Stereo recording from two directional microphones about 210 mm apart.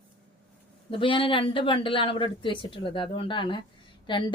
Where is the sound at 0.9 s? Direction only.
25° left (ahead or behind).